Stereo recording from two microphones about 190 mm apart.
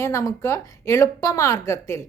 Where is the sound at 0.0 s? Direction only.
15° left (ahead or behind).